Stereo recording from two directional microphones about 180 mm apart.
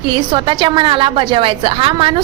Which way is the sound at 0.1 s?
25° right (ahead or behind).